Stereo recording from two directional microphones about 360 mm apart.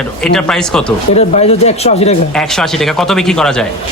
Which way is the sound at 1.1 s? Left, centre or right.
Centre.